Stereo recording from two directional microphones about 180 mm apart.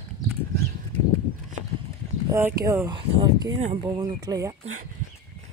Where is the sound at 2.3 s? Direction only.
15° right (ahead or behind).